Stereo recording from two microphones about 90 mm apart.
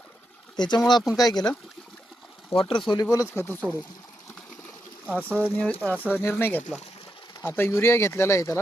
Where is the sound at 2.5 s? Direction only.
80° left.